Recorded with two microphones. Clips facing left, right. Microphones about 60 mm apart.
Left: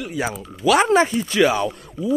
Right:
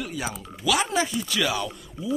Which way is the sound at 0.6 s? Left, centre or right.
Left.